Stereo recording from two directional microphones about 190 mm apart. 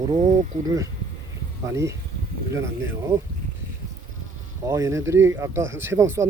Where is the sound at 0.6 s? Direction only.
15° right (ahead or behind).